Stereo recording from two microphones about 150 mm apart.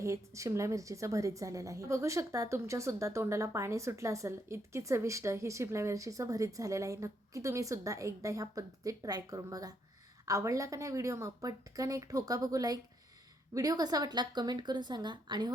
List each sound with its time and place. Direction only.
0.0 s a woman's voice: 20° right (ahead or behind)